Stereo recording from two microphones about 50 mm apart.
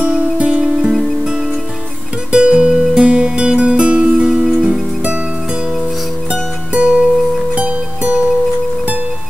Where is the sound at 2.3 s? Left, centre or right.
Right.